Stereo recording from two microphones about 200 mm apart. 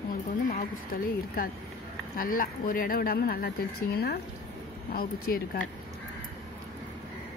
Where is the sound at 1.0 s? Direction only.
45° left (ahead or behind).